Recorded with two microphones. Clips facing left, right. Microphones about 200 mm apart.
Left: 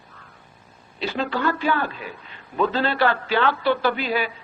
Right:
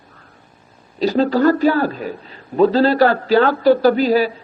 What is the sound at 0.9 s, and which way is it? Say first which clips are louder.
A man's voice: right 10 dB; 40° right (ahead or behind).